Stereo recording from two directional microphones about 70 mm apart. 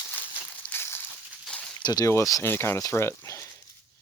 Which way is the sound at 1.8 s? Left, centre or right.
Left.